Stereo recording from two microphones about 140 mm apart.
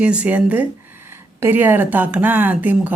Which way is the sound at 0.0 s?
10° right (ahead or behind).